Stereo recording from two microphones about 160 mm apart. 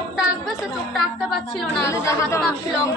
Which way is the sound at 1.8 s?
20° left (ahead or behind).